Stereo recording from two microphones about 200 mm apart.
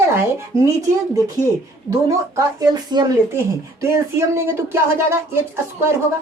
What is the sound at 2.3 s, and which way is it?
Speech, 20° right (ahead or behind).